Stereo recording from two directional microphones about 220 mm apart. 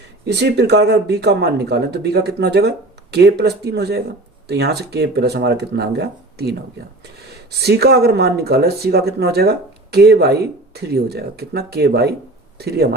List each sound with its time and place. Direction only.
0.3 s speech: 50° right (ahead or behind)